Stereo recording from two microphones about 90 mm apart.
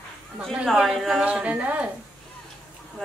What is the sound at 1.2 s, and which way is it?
Speech, 15° right (ahead or behind).